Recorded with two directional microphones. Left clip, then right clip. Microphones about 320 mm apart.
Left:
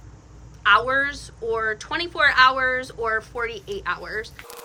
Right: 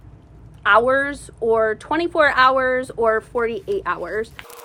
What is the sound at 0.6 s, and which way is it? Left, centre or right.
Speech, centre.